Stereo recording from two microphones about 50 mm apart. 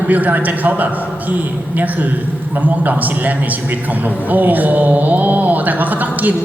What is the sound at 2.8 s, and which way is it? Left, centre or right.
Speech, right.